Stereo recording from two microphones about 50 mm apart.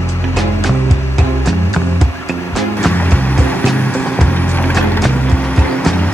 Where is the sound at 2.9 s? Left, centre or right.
Left.